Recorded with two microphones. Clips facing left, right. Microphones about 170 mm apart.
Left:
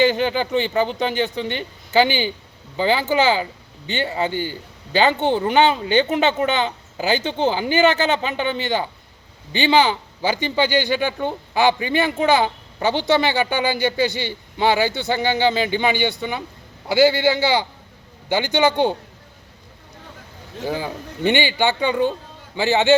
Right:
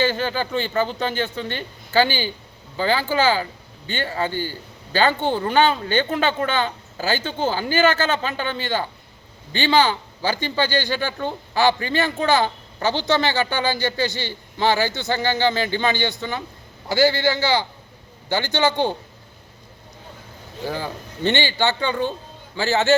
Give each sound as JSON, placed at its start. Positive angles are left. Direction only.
{"t": 0.0, "sound": "speech", "side_deg": 15}
{"t": 20.7, "sound": "speech", "side_deg": 15}